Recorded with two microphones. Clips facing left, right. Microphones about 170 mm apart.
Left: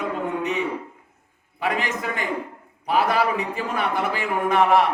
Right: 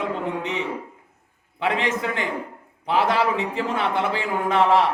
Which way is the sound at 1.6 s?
25° right (ahead or behind).